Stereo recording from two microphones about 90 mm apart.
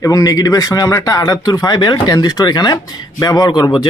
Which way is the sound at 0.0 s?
40° left (ahead or behind).